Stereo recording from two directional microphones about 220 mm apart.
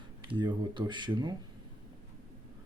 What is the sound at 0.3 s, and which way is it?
Speech, 20° right (ahead or behind).